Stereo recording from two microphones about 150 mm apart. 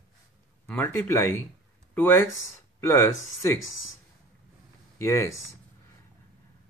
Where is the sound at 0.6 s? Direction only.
15° left (ahead or behind).